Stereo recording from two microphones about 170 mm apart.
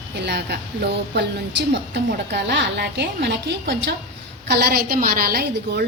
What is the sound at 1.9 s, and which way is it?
A woman's voice, 85° right.